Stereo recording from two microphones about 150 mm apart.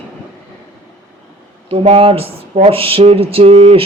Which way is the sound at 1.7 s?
40° right (ahead or behind).